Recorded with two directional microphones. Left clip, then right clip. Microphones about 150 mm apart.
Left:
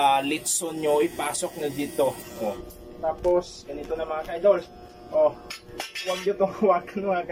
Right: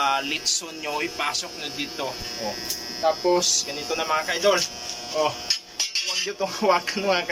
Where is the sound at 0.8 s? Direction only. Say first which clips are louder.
Left 4 dB; 45° left (ahead or behind).